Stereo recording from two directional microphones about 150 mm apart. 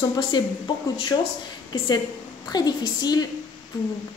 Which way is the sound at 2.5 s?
25° left (ahead or behind).